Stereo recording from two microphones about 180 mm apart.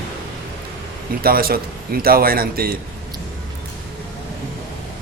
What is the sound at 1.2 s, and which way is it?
Speech, 55° right (ahead or behind).